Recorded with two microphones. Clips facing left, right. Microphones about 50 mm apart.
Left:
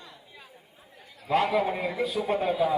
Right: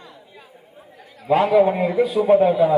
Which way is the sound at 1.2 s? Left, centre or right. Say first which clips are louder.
Right 9 dB; centre.